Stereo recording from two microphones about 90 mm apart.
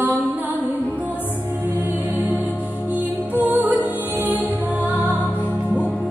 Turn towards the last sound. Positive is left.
turn(degrees=-20)  # may be behind; listen again after turning